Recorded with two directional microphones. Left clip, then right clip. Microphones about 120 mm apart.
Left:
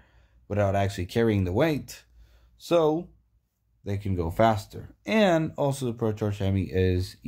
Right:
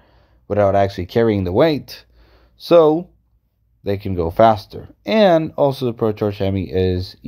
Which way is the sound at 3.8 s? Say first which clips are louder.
Right 13 dB; 65° right (ahead or behind).